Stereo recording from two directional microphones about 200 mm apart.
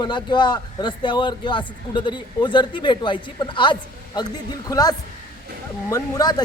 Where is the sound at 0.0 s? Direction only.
20° left (ahead or behind).